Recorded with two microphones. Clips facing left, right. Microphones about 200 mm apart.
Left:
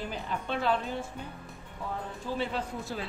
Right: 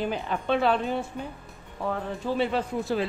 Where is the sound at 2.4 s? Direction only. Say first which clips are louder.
Right 7 dB; 75° right (ahead or behind).